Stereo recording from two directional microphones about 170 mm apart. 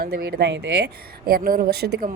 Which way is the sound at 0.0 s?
65° right (ahead or behind).